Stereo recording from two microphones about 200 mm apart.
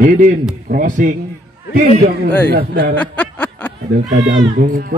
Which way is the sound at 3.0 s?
5° left (ahead or behind).